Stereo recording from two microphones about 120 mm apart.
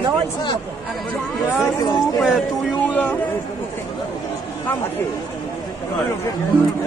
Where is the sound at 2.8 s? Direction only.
10° left (ahead or behind).